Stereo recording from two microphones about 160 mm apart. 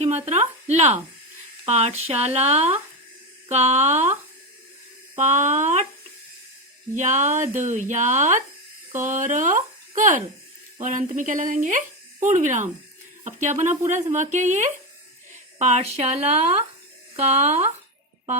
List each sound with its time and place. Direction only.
0.0 s speech: 45° right (ahead or behind)
6.9 s speech: 50° right (ahead or behind)